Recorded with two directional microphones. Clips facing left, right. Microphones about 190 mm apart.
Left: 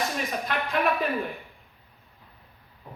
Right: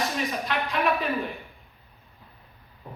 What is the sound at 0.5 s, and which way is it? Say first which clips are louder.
Speech: even; 50° left (ahead or behind).